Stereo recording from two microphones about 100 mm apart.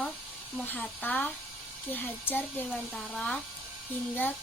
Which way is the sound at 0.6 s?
20° left (ahead or behind).